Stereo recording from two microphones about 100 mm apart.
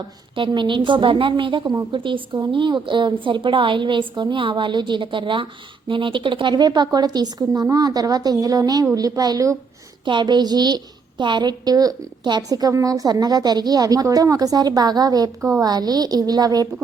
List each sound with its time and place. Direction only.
0.3 s a woman's voice: 55° right (ahead or behind); by 9.6 s 35° right (ahead or behind)
10.1 s a sound: 50° right (ahead or behind)
11.2 s a woman's voice: 50° right (ahead or behind)